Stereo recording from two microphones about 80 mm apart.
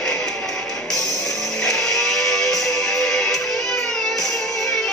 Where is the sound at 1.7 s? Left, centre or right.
Centre.